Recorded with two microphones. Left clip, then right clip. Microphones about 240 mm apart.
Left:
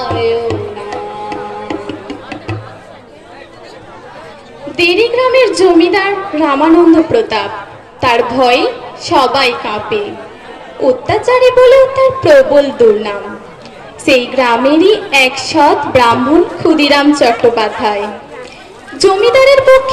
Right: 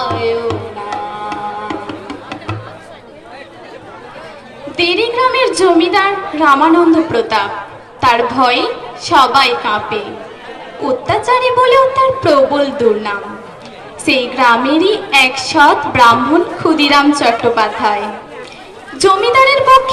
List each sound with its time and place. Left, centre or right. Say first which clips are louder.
0.0 s music: left 2 dB; right
4.8 s a sound: left 3 dB; centre
5.4 s a woman's voice: left 5 dB; right